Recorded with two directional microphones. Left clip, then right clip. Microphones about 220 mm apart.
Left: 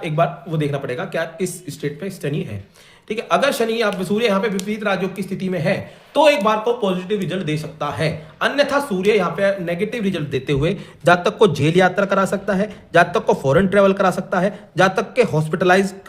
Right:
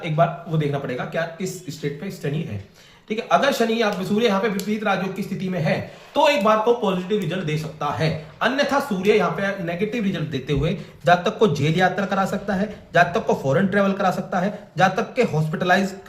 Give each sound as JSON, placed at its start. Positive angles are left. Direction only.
{"t": 0.0, "sound": "speech", "side_deg": 50}